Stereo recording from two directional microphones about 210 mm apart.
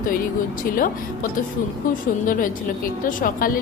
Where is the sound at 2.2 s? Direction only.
40° left (ahead or behind).